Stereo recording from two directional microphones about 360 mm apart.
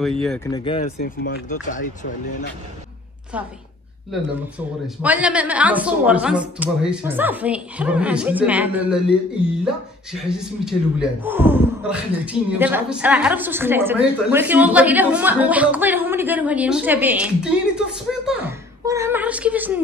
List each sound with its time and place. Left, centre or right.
0.2 s speech: centre
1.0 s speech: left
4.8 s speech: centre